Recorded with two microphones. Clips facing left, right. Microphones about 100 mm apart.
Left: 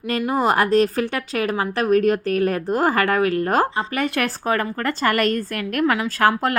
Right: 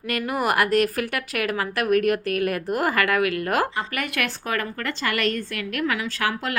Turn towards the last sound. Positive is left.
turn(degrees=40)  # may be behind; listen again after turning